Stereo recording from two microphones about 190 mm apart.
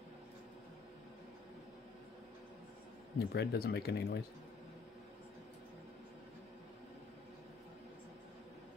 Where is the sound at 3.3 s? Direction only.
60° left (ahead or behind).